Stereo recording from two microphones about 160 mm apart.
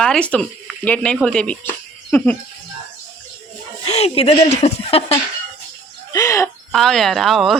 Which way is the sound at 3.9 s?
40° left (ahead or behind).